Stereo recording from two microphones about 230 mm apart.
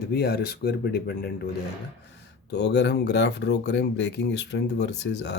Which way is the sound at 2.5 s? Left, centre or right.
Left.